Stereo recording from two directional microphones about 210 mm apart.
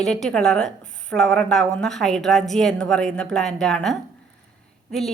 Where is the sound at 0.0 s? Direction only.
5° left (ahead or behind).